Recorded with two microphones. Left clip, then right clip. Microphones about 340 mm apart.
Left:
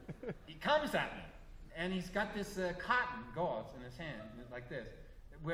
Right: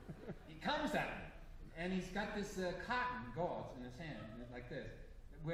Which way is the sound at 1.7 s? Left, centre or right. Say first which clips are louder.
Left 4 dB; left.